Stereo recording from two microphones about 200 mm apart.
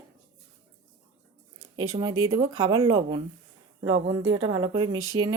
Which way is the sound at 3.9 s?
70° right (ahead or behind).